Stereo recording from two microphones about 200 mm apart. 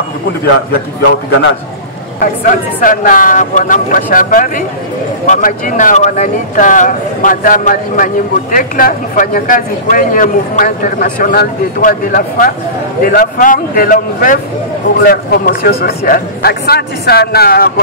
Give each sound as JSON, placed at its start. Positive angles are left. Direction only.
{"t": 2.1, "sound": "speech", "side_deg": 45}